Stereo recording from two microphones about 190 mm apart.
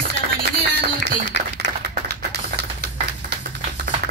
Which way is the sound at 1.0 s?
70° left (ahead or behind).